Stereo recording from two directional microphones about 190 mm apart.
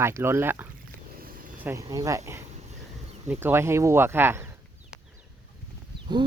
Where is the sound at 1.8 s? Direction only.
20° right (ahead or behind).